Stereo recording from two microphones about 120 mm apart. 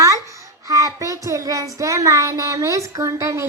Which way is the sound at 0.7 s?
25° right (ahead or behind).